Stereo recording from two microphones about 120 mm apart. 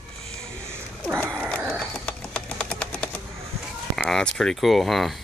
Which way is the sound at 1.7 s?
5° left (ahead or behind).